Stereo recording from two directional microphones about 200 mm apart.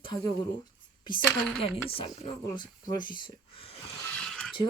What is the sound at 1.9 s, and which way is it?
Speech, 25° left (ahead or behind).